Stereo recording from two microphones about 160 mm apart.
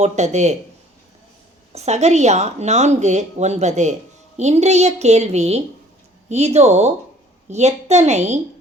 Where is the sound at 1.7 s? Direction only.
45° right (ahead or behind).